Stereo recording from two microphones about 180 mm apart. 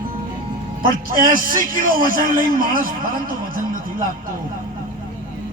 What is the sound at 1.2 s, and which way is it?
A man's voice, 50° right (ahead or behind).